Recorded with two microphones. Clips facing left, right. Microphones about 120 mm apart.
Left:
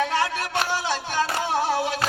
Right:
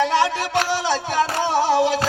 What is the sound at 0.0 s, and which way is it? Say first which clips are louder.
Music: right 5 dB; 90° right.